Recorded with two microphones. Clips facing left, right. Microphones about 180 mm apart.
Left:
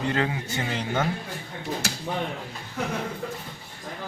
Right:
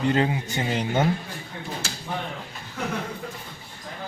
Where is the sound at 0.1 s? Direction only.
20° right (ahead or behind).